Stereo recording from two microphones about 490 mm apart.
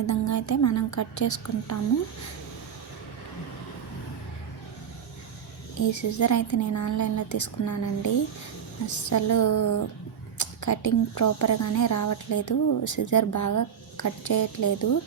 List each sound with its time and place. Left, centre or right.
0.0 s a woman's voice: left
5.9 s a woman's voice: left